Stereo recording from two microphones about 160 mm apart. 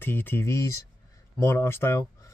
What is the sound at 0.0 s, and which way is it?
Speech, 10° left (ahead or behind).